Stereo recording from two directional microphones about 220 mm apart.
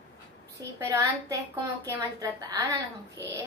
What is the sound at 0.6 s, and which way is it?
A woman's voice, 15° right (ahead or behind).